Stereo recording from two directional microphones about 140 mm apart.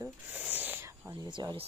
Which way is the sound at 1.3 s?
35° right (ahead or behind).